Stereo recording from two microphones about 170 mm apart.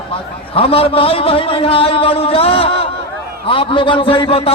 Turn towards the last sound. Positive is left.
turn(degrees=35)  # may be behind; listen again after turning